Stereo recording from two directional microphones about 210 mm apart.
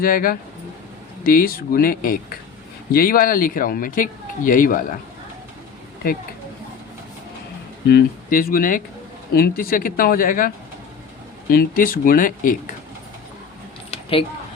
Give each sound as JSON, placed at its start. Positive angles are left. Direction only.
{"t": 0.0, "sound": "speech", "side_deg": 45}
{"t": 7.9, "sound": "speech", "side_deg": 45}
{"t": 11.5, "sound": "speech", "side_deg": 40}
{"t": 13.9, "sound": "a sound", "side_deg": 25}